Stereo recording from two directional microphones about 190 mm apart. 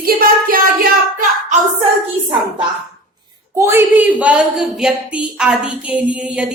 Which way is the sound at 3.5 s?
10° right (ahead or behind).